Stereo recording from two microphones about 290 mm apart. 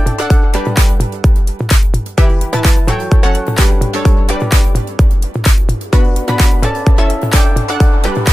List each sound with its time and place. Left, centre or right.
0.0 s music: centre